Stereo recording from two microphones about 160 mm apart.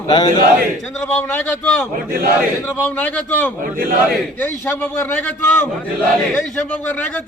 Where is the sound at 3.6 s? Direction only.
65° right (ahead or behind).